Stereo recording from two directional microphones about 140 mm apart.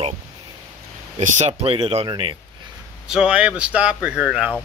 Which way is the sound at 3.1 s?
5° right (ahead or behind).